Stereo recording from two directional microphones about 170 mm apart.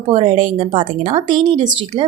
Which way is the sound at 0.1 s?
30° right (ahead or behind).